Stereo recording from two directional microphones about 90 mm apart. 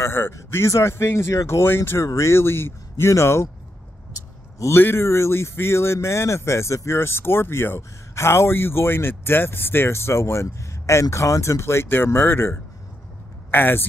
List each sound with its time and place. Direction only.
0.0 s speech: 30° left (ahead or behind)
4.6 s speech: 30° left (ahead or behind)